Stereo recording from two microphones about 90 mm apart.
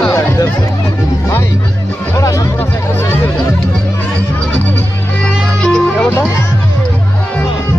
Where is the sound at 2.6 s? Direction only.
25° left (ahead or behind).